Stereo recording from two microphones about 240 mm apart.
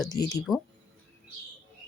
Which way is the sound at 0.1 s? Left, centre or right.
Centre.